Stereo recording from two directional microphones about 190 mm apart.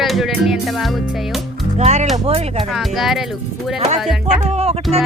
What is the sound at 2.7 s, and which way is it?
Speech, centre (ahead or behind).